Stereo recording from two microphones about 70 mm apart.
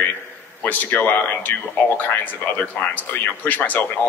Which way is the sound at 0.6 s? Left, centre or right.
Left.